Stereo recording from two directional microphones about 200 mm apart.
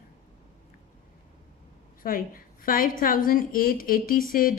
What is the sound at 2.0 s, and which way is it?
A woman's voice, 45° left (ahead or behind).